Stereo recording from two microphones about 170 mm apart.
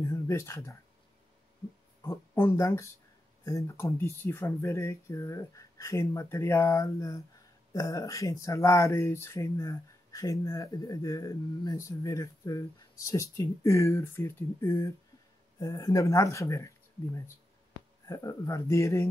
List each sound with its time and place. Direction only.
0.0 s speech: 15° left (ahead or behind)
2.0 s speech: 15° left (ahead or behind)